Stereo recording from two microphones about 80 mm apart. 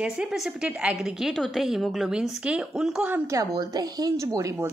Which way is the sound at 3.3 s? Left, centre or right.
Right.